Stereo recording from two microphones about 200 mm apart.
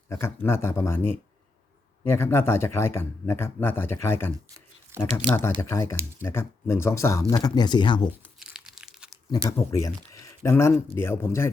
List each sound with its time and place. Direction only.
0.1 s speech: 10° left (ahead or behind)
8.4 s a sound: 5° right (ahead or behind)
9.3 s speech: 15° left (ahead or behind)